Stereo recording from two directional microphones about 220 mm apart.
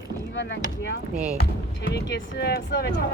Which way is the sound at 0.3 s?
60° left (ahead or behind).